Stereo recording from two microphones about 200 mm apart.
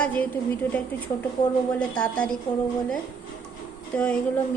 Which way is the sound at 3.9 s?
5° left (ahead or behind).